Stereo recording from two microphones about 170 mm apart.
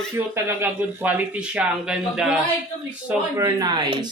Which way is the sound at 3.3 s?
20° right (ahead or behind).